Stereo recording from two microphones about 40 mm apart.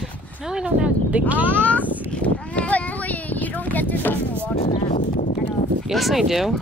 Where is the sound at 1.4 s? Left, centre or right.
Left.